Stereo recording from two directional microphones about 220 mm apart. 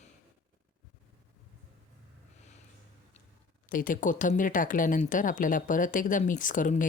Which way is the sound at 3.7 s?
40° left (ahead or behind).